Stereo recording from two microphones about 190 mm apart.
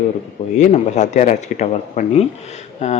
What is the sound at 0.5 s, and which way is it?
Speech, 40° left (ahead or behind).